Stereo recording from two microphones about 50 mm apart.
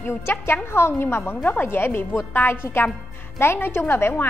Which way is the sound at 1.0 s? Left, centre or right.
Left.